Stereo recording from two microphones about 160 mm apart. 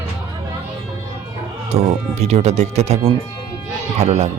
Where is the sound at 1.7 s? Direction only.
40° right (ahead or behind).